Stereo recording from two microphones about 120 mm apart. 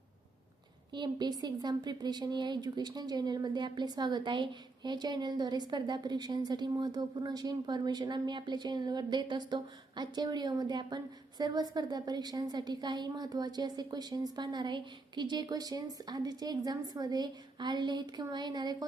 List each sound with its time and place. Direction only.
0.9 s a woman's voice: 35° right (ahead or behind)